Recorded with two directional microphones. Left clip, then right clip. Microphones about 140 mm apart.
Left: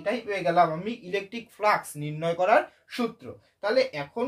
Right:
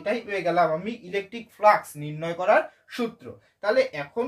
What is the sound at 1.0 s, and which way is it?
Speech, 35° left (ahead or behind).